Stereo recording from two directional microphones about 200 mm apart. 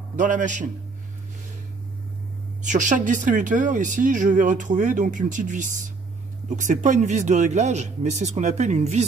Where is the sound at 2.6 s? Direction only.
40° right (ahead or behind).